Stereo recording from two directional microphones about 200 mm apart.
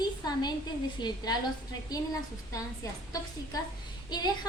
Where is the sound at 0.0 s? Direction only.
20° left (ahead or behind).